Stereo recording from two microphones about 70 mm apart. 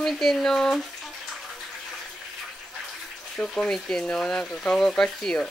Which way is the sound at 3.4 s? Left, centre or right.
Centre.